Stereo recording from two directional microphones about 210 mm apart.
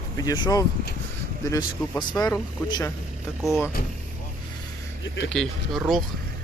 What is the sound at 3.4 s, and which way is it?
Speech, 5° right (ahead or behind).